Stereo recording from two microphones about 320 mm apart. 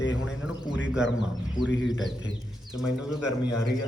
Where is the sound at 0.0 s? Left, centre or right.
Left.